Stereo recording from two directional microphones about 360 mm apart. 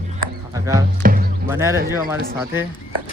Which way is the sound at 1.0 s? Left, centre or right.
Right.